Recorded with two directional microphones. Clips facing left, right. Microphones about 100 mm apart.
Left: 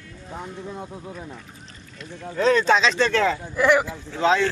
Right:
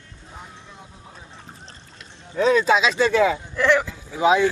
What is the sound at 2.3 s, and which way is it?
Speech, 5° right (ahead or behind).